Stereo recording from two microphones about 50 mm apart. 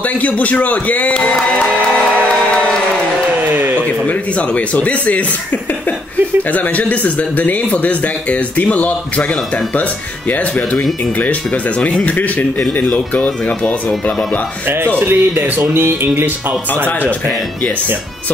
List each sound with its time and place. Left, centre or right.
0.2 s speech: left
3.5 s a sound: right
4.1 s speech: left
6.5 s speech: left
11.1 s speech: left
15.0 s speech: right